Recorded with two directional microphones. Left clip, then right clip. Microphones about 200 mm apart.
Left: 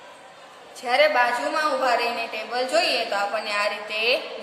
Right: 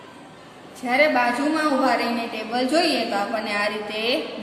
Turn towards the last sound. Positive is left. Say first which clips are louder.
# left 1 dB
turn(degrees=10)  # may be behind; listen again after turning